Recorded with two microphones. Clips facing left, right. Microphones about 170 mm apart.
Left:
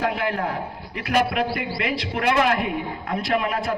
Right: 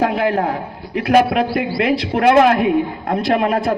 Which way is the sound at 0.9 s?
45° right (ahead or behind).